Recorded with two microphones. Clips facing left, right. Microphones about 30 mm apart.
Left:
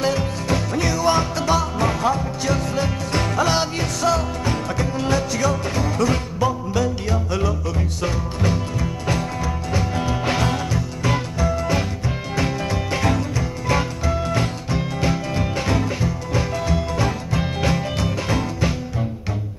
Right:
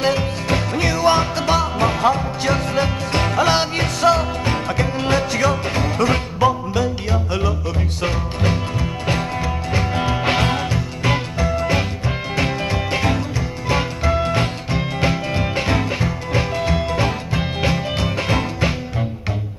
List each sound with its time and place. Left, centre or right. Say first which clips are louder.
0.0 s music: right 2 dB; right